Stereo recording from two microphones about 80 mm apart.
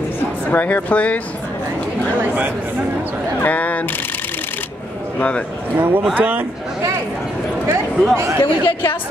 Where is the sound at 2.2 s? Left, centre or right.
Centre.